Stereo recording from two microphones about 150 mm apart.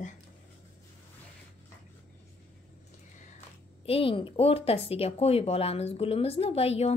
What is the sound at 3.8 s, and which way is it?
Speech, 40° left (ahead or behind).